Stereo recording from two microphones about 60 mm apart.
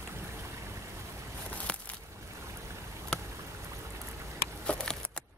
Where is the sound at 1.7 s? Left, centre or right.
Centre.